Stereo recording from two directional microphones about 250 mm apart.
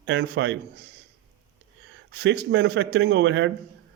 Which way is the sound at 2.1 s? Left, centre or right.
Right.